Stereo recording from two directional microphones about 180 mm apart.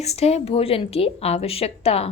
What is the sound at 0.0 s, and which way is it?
Speech, 35° left (ahead or behind).